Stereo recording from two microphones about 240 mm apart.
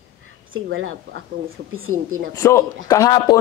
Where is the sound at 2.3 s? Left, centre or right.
Centre.